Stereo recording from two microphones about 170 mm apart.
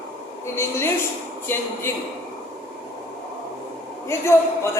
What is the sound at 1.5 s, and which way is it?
Speech, 10° left (ahead or behind).